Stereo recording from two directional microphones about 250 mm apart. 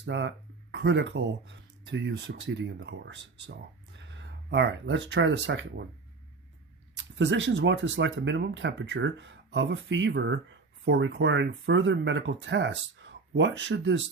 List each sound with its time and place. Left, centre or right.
0.0 s speech: right
6.9 s speech: right